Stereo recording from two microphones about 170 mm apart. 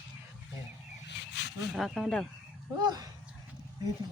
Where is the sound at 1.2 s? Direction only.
90° left.